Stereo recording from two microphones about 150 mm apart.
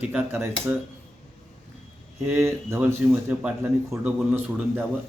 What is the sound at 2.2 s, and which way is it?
Speech, 15° right (ahead or behind).